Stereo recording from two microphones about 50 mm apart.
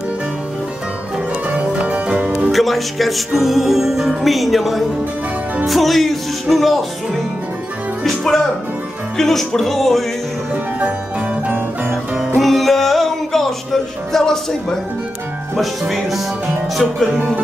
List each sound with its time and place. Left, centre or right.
1.5 s music: right
2.1 s music: centre
2.5 s music: centre
8.0 s music: centre
10.8 s music: right
12.4 s music: centre
14.1 s speech: centre
15.9 s music: centre